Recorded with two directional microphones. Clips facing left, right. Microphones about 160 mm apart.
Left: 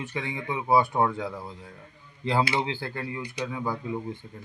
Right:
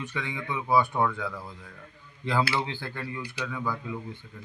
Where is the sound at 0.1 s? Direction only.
40° left (ahead or behind).